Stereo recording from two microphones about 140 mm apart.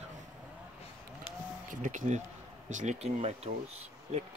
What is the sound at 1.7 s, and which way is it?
Speech, 65° right (ahead or behind).